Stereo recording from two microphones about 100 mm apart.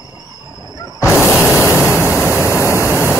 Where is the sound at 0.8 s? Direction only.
35° left (ahead or behind).